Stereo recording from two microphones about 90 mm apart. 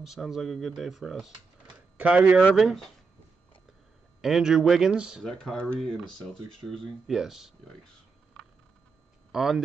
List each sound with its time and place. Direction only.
0.0 s speech: 5° right (ahead or behind)
2.0 s speech: 15° right (ahead or behind)
2.5 s speech: centre (ahead or behind)
4.2 s speech: 5° right (ahead or behind)
5.2 s speech: 5° left (ahead or behind)
9.3 s speech: 5° right (ahead or behind)